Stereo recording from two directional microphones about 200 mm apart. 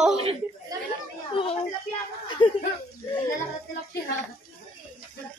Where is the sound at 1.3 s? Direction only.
25° left (ahead or behind).